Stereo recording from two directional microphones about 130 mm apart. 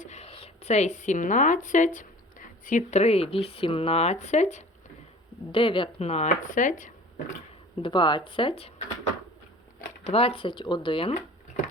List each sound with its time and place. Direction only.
0.0 s a sound: 60° left (ahead or behind); by 3.0 s 90° left
3.0 s speech: 50° left (ahead or behind)
5.5 s speech: 40° left (ahead or behind); by 6.9 s 80° left
7.8 s speech: 40° left (ahead or behind)
10.1 s speech: 45° left (ahead or behind)